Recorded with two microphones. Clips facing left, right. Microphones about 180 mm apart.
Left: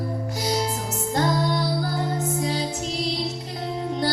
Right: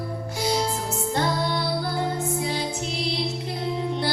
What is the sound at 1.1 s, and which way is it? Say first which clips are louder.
Music: left 3 dB; 40° left (ahead or behind).